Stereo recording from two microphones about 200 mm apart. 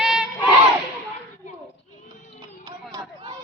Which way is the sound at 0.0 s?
5° right (ahead or behind).